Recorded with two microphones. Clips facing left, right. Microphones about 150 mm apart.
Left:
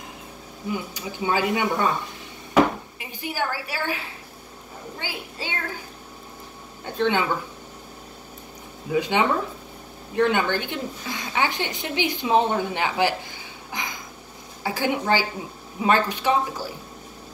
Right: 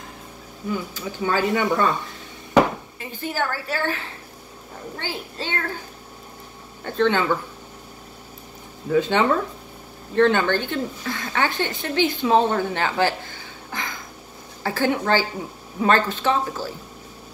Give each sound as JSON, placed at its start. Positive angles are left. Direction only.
{"t": 0.7, "sound": "a woman's voice", "side_deg": 15}
{"t": 3.0, "sound": "a woman's voice", "side_deg": 15}
{"t": 6.8, "sound": "a woman's voice", "side_deg": 15}
{"t": 8.9, "sound": "a woman's voice", "side_deg": 15}
{"t": 13.7, "sound": "a sound", "side_deg": 15}
{"t": 14.6, "sound": "a woman's voice", "side_deg": 15}